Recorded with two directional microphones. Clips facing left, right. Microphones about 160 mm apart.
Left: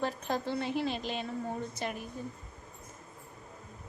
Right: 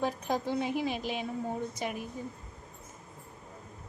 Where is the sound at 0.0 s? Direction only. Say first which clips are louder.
Right 2 dB; 10° right (ahead or behind).